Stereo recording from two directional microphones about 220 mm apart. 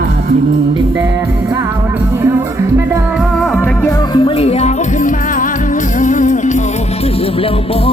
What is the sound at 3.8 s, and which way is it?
Music, 20° left (ahead or behind).